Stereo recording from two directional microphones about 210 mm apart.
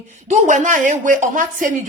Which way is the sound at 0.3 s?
35° right (ahead or behind).